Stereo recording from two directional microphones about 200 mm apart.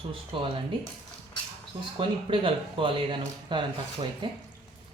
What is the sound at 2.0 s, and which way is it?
Speech, 25° right (ahead or behind).